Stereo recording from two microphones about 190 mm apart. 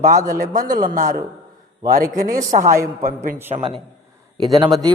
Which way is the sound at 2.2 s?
45° right (ahead or behind).